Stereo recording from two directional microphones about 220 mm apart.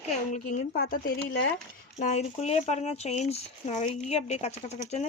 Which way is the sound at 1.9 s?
30° left (ahead or behind).